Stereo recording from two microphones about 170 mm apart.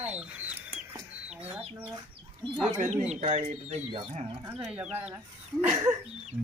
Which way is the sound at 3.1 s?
40° right (ahead or behind).